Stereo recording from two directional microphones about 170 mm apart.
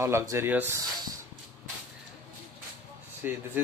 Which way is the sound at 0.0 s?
15° right (ahead or behind).